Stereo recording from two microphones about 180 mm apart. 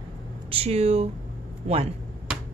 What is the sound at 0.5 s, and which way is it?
A woman's voice, 35° right (ahead or behind).